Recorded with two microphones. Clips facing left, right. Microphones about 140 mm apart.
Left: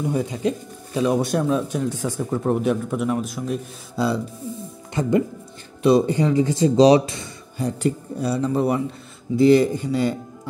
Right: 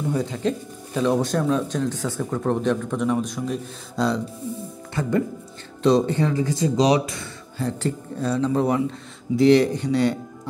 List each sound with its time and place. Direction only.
0.1 s speech: 10° left (ahead or behind)
5.0 s speech: 20° left (ahead or behind)
7.5 s speech: 15° left (ahead or behind)